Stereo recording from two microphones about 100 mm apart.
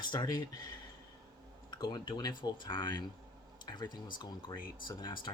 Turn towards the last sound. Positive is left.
turn(degrees=50)  # may be behind; listen again after turning